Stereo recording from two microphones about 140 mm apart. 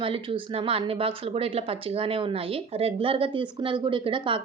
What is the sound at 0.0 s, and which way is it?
Speech, 40° right (ahead or behind).